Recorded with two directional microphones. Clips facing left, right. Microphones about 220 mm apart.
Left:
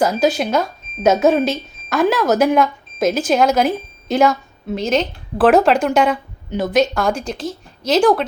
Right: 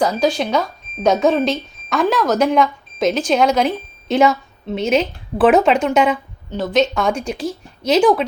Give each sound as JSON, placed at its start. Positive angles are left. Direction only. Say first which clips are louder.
{"t": 0.0, "sound": "speech", "louder": "left 1 dB", "side_deg": 0}
{"t": 6.5, "sound": "a woman's voice", "louder": "left 1 dB", "side_deg": 15}
{"t": 6.8, "sound": "speech", "louder": "even", "side_deg": 0}